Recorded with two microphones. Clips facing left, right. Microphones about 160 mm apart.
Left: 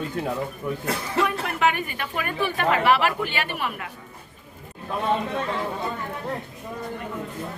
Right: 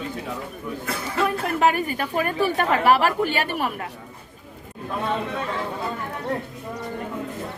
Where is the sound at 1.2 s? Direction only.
40° right (ahead or behind).